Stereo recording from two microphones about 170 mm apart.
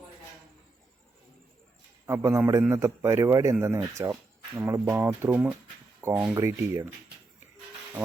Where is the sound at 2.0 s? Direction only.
15° right (ahead or behind).